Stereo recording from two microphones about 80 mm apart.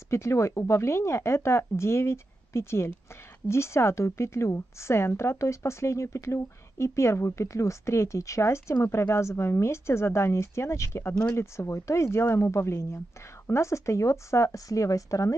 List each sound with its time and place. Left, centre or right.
0.1 s a woman's voice: left